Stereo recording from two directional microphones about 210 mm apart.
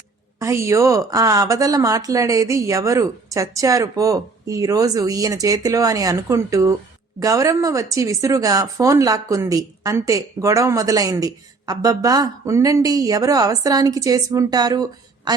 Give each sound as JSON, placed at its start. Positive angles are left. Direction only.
{"t": 0.3, "sound": "speech", "side_deg": -15}